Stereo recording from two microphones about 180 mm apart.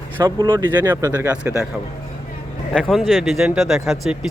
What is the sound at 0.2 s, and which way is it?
Speech, 20° right (ahead or behind).